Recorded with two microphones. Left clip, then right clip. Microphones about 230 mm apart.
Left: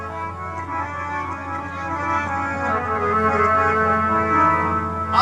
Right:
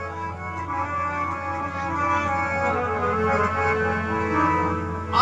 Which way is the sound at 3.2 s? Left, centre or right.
Centre.